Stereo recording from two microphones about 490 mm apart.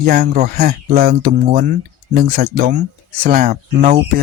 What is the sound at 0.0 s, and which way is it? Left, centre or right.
Speech, centre.